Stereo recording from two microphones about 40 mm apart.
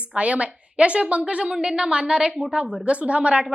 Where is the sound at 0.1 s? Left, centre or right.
Right.